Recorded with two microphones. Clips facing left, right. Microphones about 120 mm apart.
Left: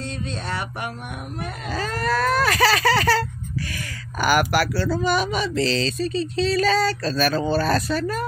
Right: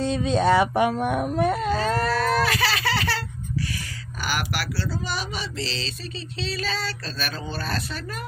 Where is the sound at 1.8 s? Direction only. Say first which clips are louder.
Even; 45° left (ahead or behind).